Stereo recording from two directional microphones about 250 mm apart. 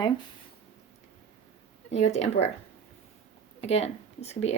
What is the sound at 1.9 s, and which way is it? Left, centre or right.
Speech, left.